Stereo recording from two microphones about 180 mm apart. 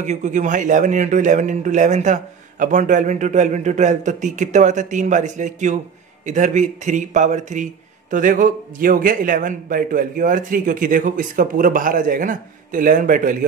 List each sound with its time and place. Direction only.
0.0 s a man's voice: 40° right (ahead or behind)